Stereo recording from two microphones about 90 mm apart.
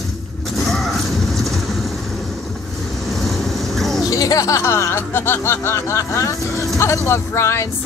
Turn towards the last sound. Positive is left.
turn(degrees=30)  # may be behind; listen again after turning